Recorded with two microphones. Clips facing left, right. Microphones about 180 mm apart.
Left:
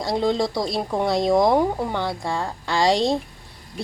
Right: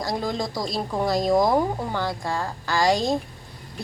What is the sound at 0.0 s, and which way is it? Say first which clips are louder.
Speech: left 5 dB; 25° left (ahead or behind).